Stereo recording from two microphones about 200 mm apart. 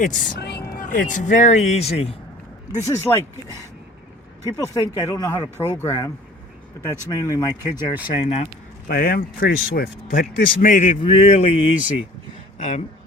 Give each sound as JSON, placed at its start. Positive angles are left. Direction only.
{"t": 0.0, "sound": "a man's voice", "side_deg": 40}
{"t": 0.3, "sound": "speech", "side_deg": 55}
{"t": 2.7, "sound": "speech", "side_deg": 15}
{"t": 4.5, "sound": "speech", "side_deg": 20}
{"t": 5.5, "sound": "speech", "side_deg": -10}
{"t": 5.8, "sound": "speech", "side_deg": 15}
{"t": 8.0, "sound": "a man's voice", "side_deg": 30}
{"t": 8.9, "sound": "a man's voice", "side_deg": 50}